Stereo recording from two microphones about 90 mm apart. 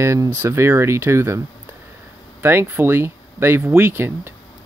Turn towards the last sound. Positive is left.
turn(degrees=-25)  # may be behind; listen again after turning